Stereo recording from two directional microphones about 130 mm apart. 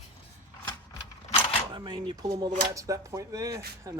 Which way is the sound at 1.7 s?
35° right (ahead or behind).